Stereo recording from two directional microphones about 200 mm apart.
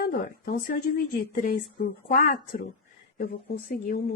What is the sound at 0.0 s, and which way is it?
Speech, 45° left (ahead or behind).